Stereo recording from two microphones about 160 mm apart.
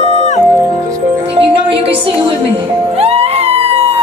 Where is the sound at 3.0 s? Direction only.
40° right (ahead or behind).